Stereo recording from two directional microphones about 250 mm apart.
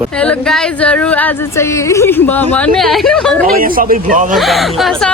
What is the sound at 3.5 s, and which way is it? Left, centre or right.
Speech, right.